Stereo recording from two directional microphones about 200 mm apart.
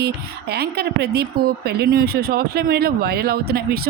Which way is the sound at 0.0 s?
55° right (ahead or behind).